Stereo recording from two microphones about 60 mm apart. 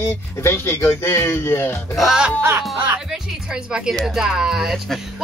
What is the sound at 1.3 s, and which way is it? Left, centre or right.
Speech, left.